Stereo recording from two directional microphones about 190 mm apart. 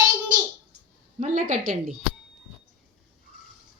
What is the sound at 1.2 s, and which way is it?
Speech, 40° right (ahead or behind).